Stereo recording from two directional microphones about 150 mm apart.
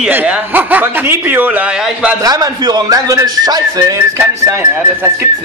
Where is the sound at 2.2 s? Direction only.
25° right (ahead or behind).